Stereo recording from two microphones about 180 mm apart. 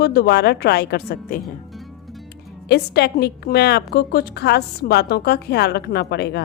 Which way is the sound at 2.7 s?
65° left (ahead or behind).